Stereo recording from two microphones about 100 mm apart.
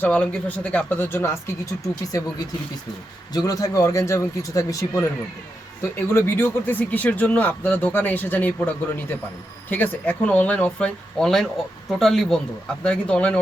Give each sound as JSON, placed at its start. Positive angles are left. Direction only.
{"t": 0.0, "sound": "speech", "side_deg": 15}
{"t": 3.3, "sound": "speech", "side_deg": 40}
{"t": 6.1, "sound": "speech", "side_deg": 25}